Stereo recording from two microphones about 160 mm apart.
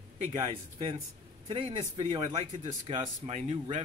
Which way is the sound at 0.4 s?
40° right (ahead or behind).